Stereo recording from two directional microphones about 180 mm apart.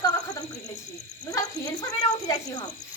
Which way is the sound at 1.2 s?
20° left (ahead or behind).